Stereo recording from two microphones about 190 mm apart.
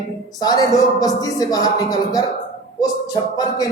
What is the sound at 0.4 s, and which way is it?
Speech, 20° left (ahead or behind).